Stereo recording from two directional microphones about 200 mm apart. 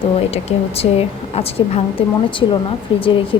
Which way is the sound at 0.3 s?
30° left (ahead or behind).